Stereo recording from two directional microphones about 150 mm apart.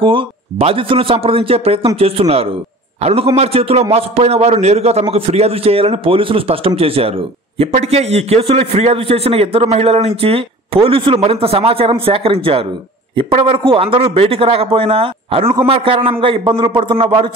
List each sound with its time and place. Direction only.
0.0 s a man's voice: 35° right (ahead or behind)